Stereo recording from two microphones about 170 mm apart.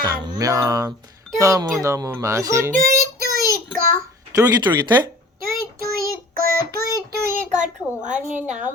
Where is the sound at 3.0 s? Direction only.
65° right (ahead or behind).